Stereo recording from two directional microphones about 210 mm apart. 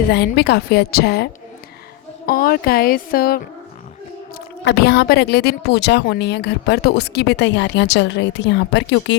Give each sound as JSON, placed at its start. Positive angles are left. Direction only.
{"t": 0.1, "sound": "a woman's voice", "side_deg": 50}